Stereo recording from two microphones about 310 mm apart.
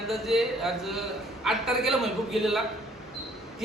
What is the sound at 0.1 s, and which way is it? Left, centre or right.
A man's voice, centre.